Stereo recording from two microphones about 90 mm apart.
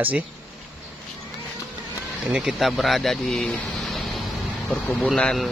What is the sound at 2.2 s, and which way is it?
Speech, 5° right (ahead or behind).